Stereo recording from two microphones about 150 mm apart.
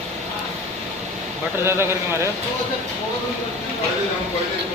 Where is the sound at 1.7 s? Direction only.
15° right (ahead or behind).